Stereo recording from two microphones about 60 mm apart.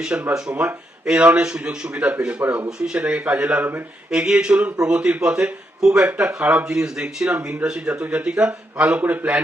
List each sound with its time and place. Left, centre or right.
0.0 s a man's voice: centre
2.4 s speech: right
2.6 s a man's voice: centre
3.0 s speech: right
3.6 s speech: right
4.1 s a man's voice: centre
6.4 s speech: right
6.7 s a man's voice: centre